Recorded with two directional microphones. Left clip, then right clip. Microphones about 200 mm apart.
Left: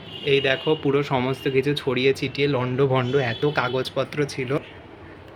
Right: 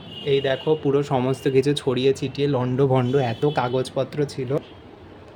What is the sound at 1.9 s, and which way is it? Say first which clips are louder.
Speech: even; 20° right (ahead or behind).